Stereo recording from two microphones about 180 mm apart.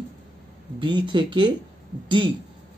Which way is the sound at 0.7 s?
25° right (ahead or behind).